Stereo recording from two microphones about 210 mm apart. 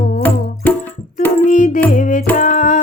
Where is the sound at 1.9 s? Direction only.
40° left (ahead or behind).